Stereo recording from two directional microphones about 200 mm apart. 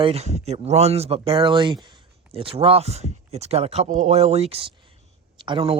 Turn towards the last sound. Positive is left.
turn(degrees=-25)  # may be behind; listen again after turning